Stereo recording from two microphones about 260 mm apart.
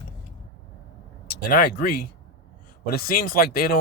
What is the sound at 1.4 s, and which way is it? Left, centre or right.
Speech, left.